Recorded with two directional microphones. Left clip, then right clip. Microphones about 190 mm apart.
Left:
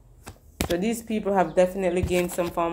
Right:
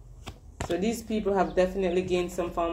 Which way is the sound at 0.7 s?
30° left (ahead or behind).